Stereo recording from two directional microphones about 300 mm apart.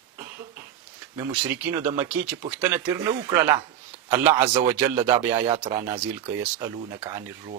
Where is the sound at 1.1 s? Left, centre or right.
Centre.